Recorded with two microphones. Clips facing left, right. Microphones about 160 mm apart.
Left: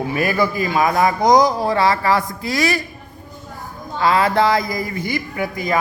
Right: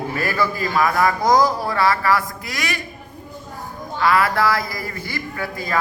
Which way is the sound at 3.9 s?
20° left (ahead or behind).